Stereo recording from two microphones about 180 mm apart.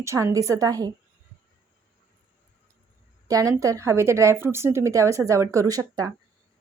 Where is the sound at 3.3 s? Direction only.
20° right (ahead or behind).